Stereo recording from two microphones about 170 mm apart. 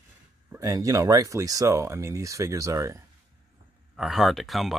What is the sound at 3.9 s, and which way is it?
Speech, centre (ahead or behind).